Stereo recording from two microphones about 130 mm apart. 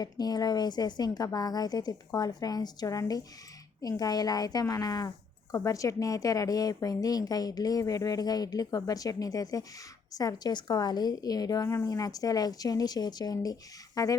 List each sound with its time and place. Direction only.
0.0 s a woman's voice: 30° left (ahead or behind)